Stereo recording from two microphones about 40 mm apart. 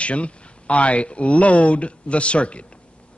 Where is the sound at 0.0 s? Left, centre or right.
Left.